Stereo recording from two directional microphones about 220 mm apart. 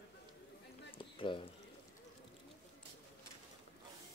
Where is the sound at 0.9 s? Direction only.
20° left (ahead or behind).